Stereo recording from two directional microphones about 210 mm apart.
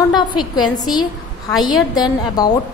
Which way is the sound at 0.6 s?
20° left (ahead or behind).